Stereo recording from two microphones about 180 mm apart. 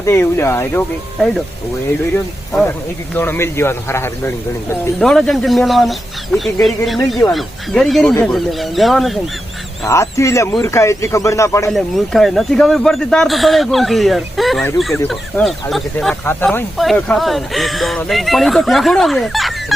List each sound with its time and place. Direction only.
0.0 s speech: 15° left (ahead or behind)
2.5 s speech: 5° left (ahead or behind)
4.7 s speech: 5° left (ahead or behind)
9.8 s speech: 15° left (ahead or behind)
11.7 s speech: centre (ahead or behind)